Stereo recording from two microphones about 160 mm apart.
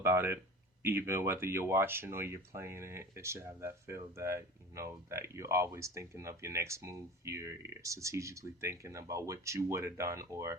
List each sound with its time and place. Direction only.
0.0 s speech: 15° right (ahead or behind)